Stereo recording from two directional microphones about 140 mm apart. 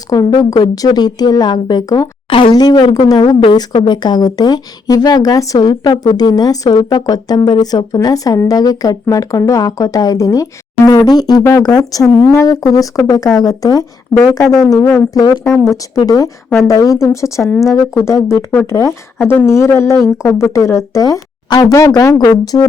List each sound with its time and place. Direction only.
0.1 s a woman's voice: 30° left (ahead or behind)